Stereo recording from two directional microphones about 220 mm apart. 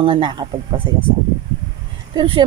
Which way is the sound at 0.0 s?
25° right (ahead or behind).